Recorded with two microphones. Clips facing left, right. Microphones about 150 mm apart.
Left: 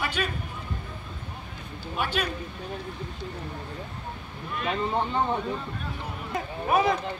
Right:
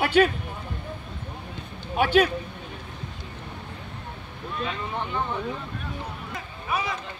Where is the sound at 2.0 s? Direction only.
55° right (ahead or behind).